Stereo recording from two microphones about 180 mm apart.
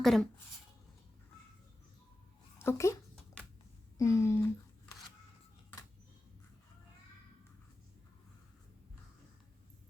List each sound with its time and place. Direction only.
0.0 s speech: centre (ahead or behind)
2.6 s speech: 15° left (ahead or behind)